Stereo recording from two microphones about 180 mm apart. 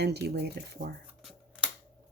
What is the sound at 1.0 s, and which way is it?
Shuffling cards, 5° right (ahead or behind).